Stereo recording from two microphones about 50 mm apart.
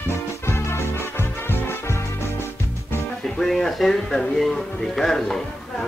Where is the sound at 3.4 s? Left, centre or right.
Centre.